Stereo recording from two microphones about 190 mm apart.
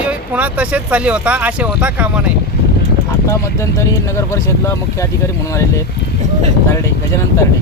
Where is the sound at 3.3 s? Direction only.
15° left (ahead or behind).